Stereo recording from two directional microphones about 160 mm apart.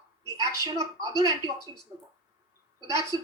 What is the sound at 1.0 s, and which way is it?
Speech, 20° right (ahead or behind).